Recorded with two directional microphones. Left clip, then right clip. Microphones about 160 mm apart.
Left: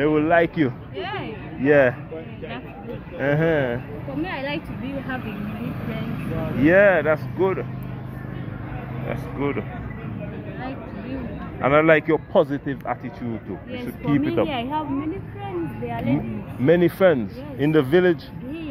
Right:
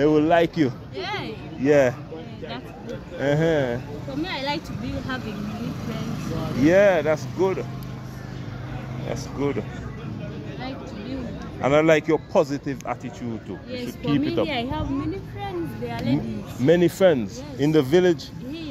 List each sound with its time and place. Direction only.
0.0 s a man's voice: 40° right (ahead or behind)
0.6 s a sound: 25° right (ahead or behind)
3.2 s speech: 20° right (ahead or behind)
6.6 s speech: 20° right (ahead or behind)
9.4 s speech: 25° right (ahead or behind)
11.6 s speech: 20° right (ahead or behind)
14.0 s speech: 5° right (ahead or behind)
14.5 s speech: 45° right (ahead or behind)
15.4 s speech: 25° right (ahead or behind)